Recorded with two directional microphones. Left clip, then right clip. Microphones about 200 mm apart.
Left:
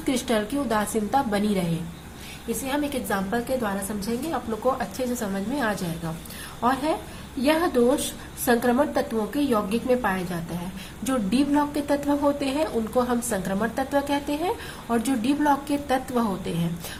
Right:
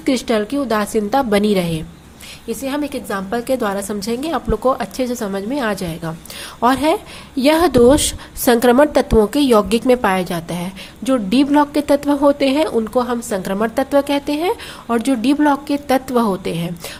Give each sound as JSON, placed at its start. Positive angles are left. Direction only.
{"t": 0.0, "sound": "a woman's voice", "side_deg": -30}
{"t": 11.0, "sound": "a woman's voice", "side_deg": -35}